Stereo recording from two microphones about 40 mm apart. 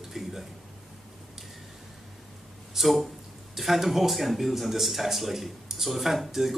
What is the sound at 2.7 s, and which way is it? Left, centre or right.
Speech, centre.